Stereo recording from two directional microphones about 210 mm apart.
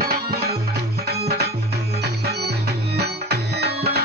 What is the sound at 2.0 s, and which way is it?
Music, 50° right (ahead or behind).